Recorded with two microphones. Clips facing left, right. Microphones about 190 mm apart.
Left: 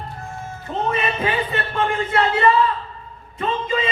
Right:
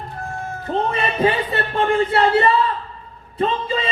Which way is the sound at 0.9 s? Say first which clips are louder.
Right 2 dB; 35° right (ahead or behind).